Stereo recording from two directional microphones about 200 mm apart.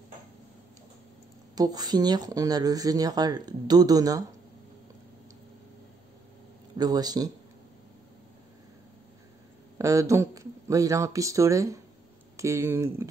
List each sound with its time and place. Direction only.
1.5 s speech: 20° right (ahead or behind)
6.8 s speech: 20° right (ahead or behind)
9.8 s speech: 15° right (ahead or behind)